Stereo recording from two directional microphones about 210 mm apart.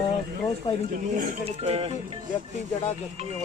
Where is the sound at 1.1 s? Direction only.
35° right (ahead or behind).